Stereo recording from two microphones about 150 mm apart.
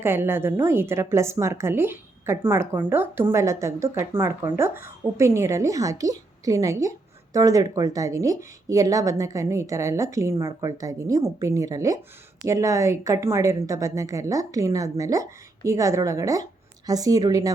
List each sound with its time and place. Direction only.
0.0 s a woman's voice: 15° right (ahead or behind)